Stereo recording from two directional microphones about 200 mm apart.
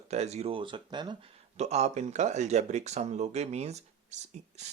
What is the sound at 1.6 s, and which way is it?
Speech, 35° right (ahead or behind).